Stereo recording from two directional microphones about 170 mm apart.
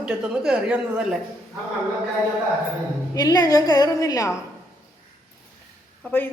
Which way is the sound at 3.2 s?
20° left (ahead or behind).